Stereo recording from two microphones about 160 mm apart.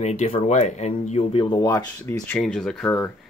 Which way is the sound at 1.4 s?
20° left (ahead or behind).